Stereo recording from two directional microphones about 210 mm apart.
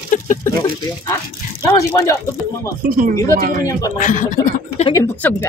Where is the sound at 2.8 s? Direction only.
40° right (ahead or behind).